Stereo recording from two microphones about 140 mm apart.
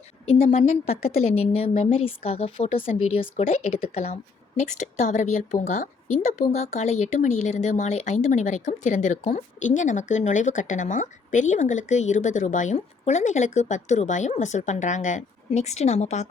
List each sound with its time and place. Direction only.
0.3 s a woman's voice: 50° left (ahead or behind); by 5.9 s 65° left (ahead or behind)
6.5 s a woman's voice: 50° left (ahead or behind)